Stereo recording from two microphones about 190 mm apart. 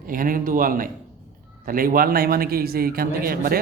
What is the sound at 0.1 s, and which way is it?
A man's voice, 50° right (ahead or behind).